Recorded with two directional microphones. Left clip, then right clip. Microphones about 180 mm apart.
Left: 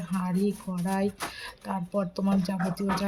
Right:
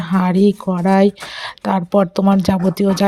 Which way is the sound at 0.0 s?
45° right (ahead or behind).